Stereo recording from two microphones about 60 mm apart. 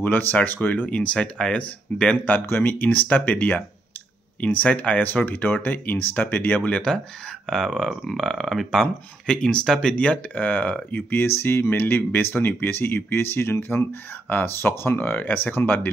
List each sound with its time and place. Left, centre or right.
0.0 s speech: left; by 2.1 s centre
2.2 s speech: left
6.7 s speech: centre; by 15.9 s left